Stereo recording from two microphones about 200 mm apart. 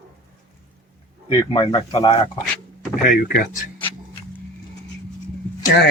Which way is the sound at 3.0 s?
45° left (ahead or behind).